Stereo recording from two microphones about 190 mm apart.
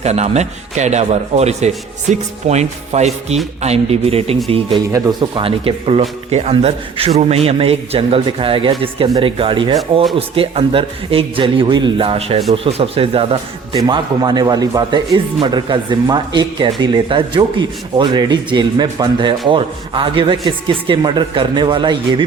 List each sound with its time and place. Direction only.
0.0 s speech: 35° right (ahead or behind)
4.9 s speech: 15° right (ahead or behind)
5.4 s speech: 30° right (ahead or behind)